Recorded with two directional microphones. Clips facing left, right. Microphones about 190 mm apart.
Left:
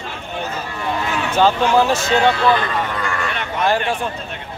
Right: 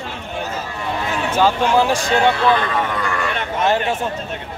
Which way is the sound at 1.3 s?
10° right (ahead or behind).